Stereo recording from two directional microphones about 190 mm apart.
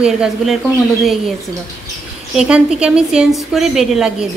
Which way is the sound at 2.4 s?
5° right (ahead or behind).